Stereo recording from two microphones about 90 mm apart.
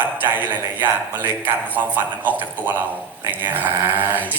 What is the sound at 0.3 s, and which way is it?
A man's voice, 20° right (ahead or behind).